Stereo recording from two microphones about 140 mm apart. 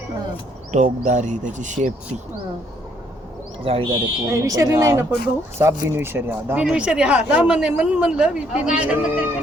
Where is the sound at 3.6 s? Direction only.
40° right (ahead or behind).